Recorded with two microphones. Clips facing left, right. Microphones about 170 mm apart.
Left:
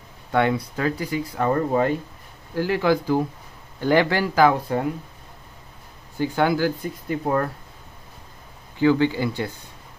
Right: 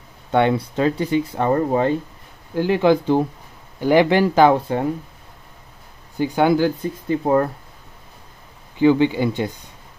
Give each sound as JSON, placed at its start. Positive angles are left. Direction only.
{"t": 0.3, "sound": "speech", "side_deg": -25}
{"t": 2.5, "sound": "speech", "side_deg": -20}
{"t": 6.1, "sound": "speech", "side_deg": -15}
{"t": 8.7, "sound": "speech", "side_deg": -20}